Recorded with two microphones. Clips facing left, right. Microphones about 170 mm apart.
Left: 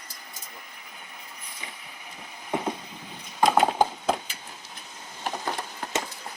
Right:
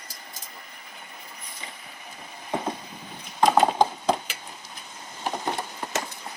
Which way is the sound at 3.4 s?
5° left (ahead or behind).